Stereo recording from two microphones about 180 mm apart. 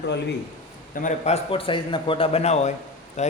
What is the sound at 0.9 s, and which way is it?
A man's voice, 45° left (ahead or behind).